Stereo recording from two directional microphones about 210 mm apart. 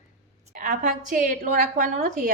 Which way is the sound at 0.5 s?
40° right (ahead or behind).